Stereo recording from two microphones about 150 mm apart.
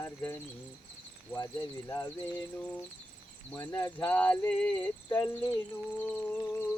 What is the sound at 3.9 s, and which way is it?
Cricket, 10° left (ahead or behind).